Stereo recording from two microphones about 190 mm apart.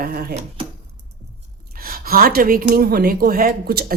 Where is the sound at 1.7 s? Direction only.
50° right (ahead or behind).